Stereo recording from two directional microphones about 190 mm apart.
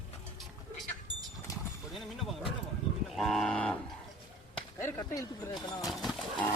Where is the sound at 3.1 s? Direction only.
Centre (ahead or behind).